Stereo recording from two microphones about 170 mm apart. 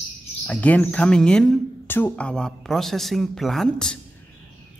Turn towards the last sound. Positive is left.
turn(degrees=5)  # may be behind; listen again after turning